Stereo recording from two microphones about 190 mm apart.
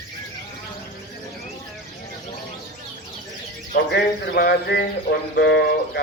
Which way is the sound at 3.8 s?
55° left (ahead or behind).